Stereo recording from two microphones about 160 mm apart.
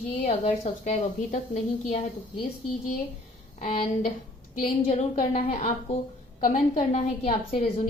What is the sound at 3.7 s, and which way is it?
Speech, 40° left (ahead or behind).